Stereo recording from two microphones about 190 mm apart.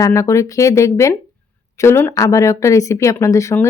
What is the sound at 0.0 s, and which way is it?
Speech, 15° left (ahead or behind).